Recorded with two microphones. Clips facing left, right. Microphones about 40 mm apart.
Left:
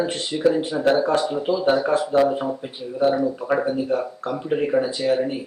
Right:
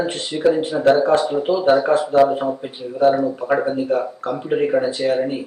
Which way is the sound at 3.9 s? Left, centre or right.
Right.